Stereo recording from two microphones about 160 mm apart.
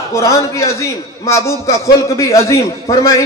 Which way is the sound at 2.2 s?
20° left (ahead or behind).